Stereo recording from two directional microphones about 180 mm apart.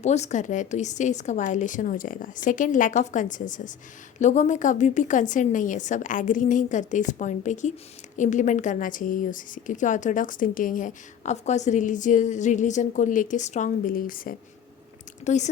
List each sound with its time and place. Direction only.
0.0 s a woman's voice: 40° left (ahead or behind)
15.2 s speech: 40° left (ahead or behind)